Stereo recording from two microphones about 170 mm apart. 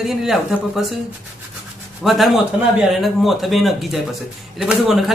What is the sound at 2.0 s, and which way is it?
A man's voice, centre (ahead or behind).